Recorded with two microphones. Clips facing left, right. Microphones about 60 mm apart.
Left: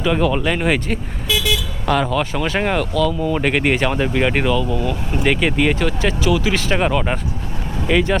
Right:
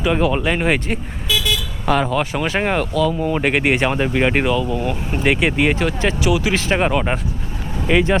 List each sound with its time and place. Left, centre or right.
0.0 s speech: centre
4.8 s speech: right
5.2 s speech: centre